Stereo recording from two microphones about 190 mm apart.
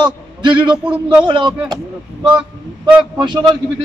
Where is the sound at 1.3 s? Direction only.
25° right (ahead or behind).